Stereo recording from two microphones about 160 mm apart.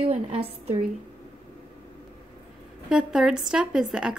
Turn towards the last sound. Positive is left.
turn(degrees=-5)  # may be behind; listen again after turning